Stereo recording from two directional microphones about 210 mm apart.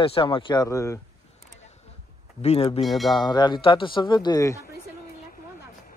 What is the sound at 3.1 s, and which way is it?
A man's voice, 20° left (ahead or behind).